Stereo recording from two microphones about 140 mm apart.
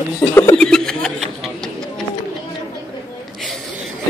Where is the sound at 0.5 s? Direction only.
5° left (ahead or behind).